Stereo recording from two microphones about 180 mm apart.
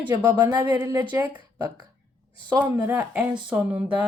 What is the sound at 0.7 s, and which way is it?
Speech, 15° right (ahead or behind).